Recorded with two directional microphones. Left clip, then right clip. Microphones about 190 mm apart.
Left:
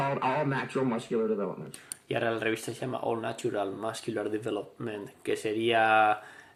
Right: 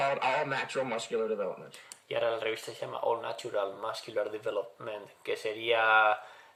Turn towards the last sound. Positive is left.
turn(degrees=20)  # may be behind; listen again after turning